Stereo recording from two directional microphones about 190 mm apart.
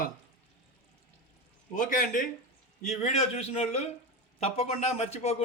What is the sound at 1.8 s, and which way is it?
A man's voice, 45° left (ahead or behind).